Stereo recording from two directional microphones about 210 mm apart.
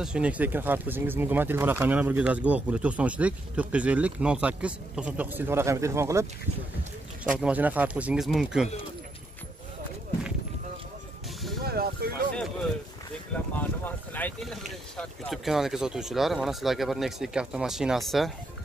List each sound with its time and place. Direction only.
0.0 s speech: 5° right (ahead or behind)
7.3 s speech: 5° right (ahead or behind)
11.6 s a sound: 45° right (ahead or behind)
13.6 s speech: 10° left (ahead or behind)